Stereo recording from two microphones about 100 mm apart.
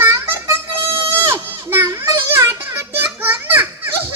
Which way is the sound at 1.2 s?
25° right (ahead or behind).